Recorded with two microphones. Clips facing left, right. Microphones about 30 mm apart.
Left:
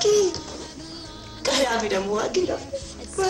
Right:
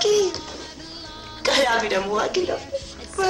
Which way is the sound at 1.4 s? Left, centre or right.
Centre.